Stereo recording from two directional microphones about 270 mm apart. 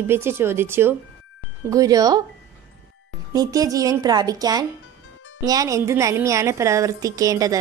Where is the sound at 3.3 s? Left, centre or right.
Centre.